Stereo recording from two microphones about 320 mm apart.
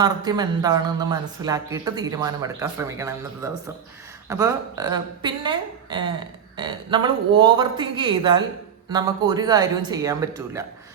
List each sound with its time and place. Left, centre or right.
0.0 s a woman's voice: centre